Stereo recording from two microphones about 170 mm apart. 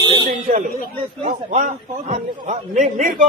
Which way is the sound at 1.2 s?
40° right (ahead or behind).